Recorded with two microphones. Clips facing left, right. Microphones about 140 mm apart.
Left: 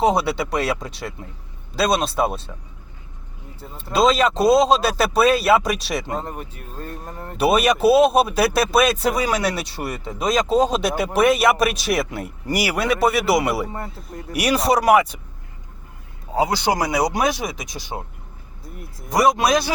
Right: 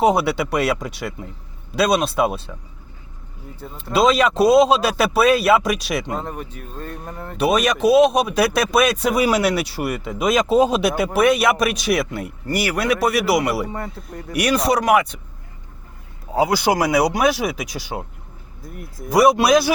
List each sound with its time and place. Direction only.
0.3 s a man's voice: centre (ahead or behind)
1.7 s a man's voice: centre (ahead or behind)
3.8 s a man's voice: centre (ahead or behind)
7.0 s speech: 35° left (ahead or behind)
7.3 s a man's voice: 5° left (ahead or behind)
16.3 s a man's voice: 5° right (ahead or behind)
19.0 s speech: 10° right (ahead or behind)